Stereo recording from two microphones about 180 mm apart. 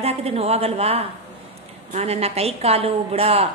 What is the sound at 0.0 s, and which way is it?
A woman's voice, 35° right (ahead or behind).